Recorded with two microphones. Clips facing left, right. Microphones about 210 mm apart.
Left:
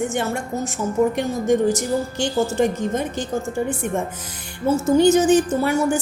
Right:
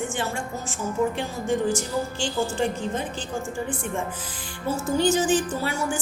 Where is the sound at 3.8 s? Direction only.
55° left (ahead or behind).